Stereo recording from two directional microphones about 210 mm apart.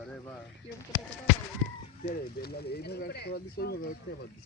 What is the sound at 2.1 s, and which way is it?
Speech, 50° left (ahead or behind).